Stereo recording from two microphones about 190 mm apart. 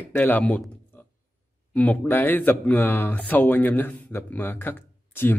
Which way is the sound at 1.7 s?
10° left (ahead or behind).